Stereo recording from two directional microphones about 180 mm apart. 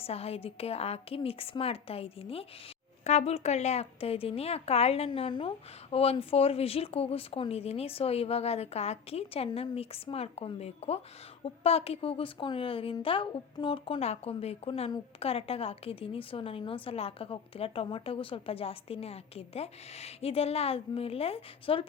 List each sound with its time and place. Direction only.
0.0 s a woman's voice: 35° left (ahead or behind)